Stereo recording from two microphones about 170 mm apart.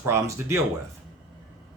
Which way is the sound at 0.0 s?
15° right (ahead or behind).